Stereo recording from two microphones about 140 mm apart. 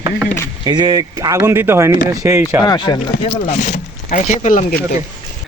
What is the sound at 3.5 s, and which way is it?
Speech, 60° left (ahead or behind).